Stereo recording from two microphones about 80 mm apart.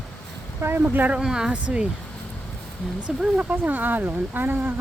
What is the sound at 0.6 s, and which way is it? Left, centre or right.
Speech, right.